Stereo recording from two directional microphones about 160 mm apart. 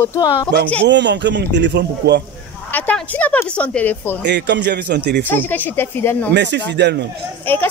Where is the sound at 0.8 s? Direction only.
90° right.